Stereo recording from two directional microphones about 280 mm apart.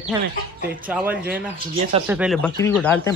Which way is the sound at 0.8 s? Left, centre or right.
Centre.